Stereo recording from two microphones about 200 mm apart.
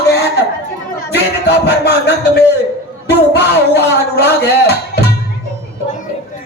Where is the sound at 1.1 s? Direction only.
55° left (ahead or behind).